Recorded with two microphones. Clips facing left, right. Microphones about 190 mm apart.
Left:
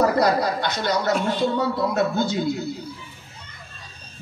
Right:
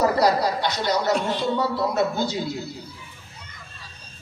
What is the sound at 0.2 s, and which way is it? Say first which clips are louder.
Speech: even; 50° left (ahead or behind).